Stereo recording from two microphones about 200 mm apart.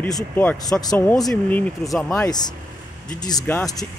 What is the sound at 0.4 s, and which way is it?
Speech, 5° left (ahead or behind).